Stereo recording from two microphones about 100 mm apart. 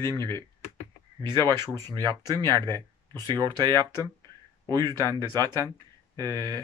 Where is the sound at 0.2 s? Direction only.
25° left (ahead or behind).